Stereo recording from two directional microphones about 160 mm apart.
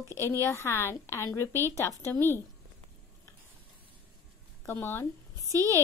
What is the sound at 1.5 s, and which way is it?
Speech, 15° right (ahead or behind).